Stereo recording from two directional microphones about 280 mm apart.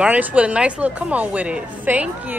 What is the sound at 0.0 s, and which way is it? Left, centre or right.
A woman's voice, centre.